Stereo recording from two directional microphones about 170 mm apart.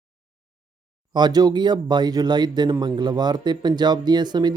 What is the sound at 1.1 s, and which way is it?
Speech, 25° right (ahead or behind).